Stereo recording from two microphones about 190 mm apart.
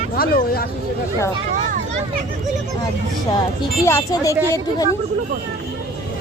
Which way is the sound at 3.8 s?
15° left (ahead or behind).